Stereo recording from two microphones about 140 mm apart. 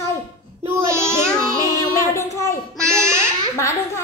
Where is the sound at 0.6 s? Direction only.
20° right (ahead or behind).